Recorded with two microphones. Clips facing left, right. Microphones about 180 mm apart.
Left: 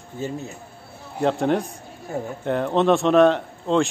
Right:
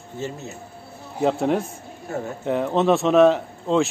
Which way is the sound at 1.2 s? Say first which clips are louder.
Even; centre (ahead or behind).